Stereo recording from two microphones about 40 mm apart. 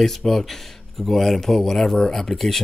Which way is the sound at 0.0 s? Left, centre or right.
Centre.